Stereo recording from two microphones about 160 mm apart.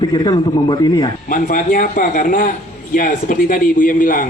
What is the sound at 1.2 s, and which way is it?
A man's voice, 60° left (ahead or behind).